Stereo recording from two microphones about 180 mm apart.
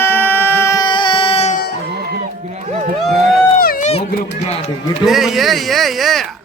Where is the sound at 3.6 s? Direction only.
55° left (ahead or behind).